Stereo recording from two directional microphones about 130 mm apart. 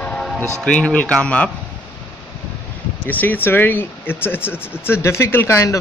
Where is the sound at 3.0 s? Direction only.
15° left (ahead or behind).